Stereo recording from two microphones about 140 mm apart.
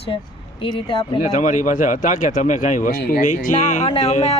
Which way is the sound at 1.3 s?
65° left (ahead or behind).